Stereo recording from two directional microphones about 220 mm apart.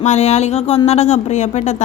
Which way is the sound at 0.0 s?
30° left (ahead or behind).